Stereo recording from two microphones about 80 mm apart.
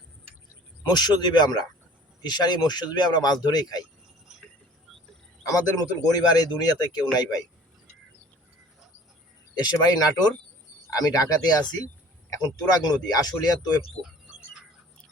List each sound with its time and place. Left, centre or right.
0.9 s speech: left
5.5 s speech: left
9.6 s speech: left
14.0 s a sound: centre